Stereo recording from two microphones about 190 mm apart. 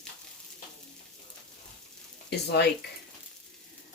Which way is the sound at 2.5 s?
60° left (ahead or behind).